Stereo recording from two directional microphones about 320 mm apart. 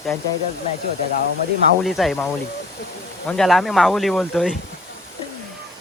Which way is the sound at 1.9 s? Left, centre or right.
Centre.